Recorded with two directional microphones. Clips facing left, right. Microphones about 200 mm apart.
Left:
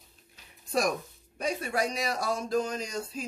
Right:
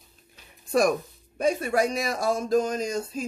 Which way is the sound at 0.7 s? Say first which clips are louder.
Right 6 dB; 55° right (ahead or behind).